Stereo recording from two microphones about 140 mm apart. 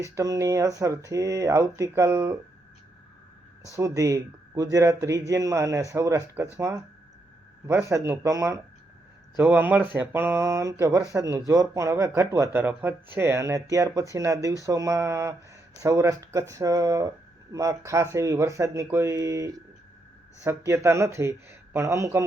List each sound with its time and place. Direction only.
0.2 s speech: 25° right (ahead or behind)
3.7 s speech: 25° right (ahead or behind)